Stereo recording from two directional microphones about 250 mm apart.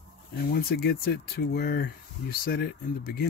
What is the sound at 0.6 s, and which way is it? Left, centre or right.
Speech, left.